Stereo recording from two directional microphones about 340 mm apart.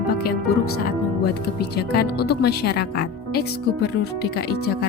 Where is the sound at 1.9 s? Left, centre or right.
Left.